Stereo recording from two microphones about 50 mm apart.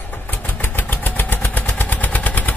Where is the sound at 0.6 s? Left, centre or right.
Left.